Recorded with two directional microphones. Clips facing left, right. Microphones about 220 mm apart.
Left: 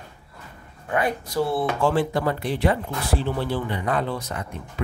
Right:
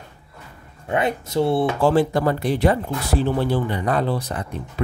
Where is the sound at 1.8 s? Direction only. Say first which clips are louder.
Right 4 dB; 40° right (ahead or behind).